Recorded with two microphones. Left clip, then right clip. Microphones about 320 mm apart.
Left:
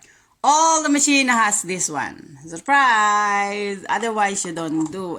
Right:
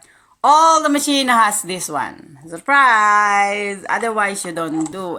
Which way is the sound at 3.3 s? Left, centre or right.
Left.